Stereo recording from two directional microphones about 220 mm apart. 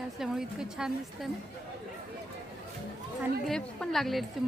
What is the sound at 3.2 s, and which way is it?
A woman's voice, centre (ahead or behind).